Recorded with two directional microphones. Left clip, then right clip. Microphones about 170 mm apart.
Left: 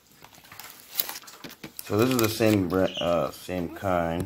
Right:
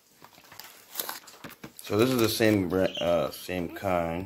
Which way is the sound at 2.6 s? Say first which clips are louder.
Left 1 dB; 20° right (ahead or behind).